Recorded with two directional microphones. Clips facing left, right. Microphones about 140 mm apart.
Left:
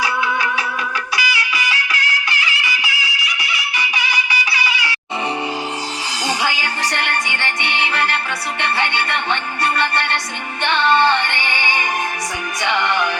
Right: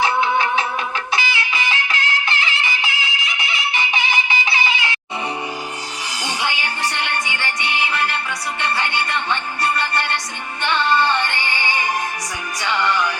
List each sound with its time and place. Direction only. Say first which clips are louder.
0.0 s a sound: right 2 dB; 25° right (ahead or behind)
1.1 s music: right 1 dB; 25° right (ahead or behind)
6.4 s music: left 2 dB; 90° left
12.6 s music: left 1 dB; 60° left (ahead or behind)